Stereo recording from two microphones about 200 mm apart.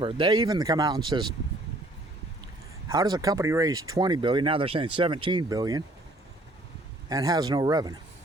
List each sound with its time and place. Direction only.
0.0 s speech: 25° right (ahead or behind)
2.9 s speech: 20° right (ahead or behind)
7.1 s speech: 20° right (ahead or behind)